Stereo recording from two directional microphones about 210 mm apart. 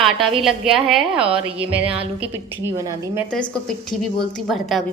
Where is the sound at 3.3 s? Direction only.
5° left (ahead or behind).